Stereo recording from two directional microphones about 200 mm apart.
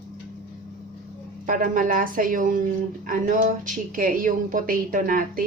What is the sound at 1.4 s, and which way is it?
Speech, 40° right (ahead or behind).